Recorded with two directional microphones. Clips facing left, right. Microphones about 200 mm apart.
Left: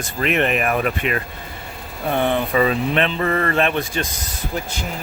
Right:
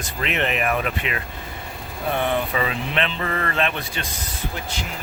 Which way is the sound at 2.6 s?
45° left (ahead or behind).